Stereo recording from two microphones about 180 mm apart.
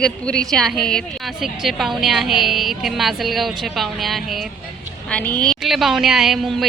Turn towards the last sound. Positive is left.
turn(degrees=0)  # may be behind; listen again after turning